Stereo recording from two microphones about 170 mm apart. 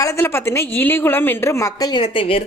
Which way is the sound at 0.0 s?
15° left (ahead or behind).